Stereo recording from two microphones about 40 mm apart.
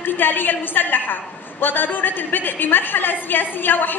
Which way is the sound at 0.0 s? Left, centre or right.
Left.